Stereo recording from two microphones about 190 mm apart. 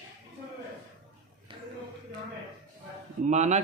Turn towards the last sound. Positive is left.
turn(degrees=-40)  # may be behind; listen again after turning